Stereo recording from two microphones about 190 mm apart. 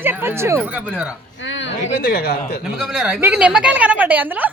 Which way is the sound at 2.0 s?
55° left (ahead or behind).